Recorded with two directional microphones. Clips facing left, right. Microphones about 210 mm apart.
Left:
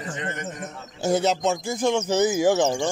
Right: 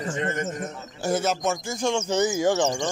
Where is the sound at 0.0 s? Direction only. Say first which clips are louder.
Right 4 dB; 45° right (ahead or behind).